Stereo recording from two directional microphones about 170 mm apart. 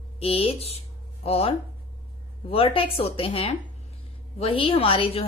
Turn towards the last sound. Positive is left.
turn(degrees=35)  # may be behind; listen again after turning